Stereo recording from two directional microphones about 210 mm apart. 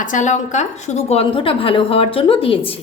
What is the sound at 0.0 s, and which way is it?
A woman's voice, 35° left (ahead or behind).